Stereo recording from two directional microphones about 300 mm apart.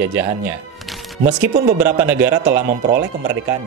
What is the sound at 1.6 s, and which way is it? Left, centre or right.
Speech, centre.